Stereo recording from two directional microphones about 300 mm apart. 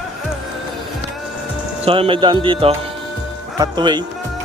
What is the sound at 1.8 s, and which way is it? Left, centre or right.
A man's voice, centre.